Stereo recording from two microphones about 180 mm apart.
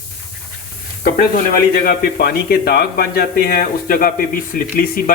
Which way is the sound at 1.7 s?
60° left (ahead or behind).